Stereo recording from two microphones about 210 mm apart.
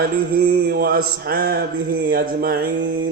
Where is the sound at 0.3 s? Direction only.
45° right (ahead or behind).